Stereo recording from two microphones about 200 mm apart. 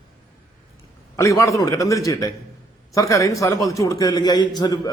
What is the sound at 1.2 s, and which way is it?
A man's voice, 15° left (ahead or behind).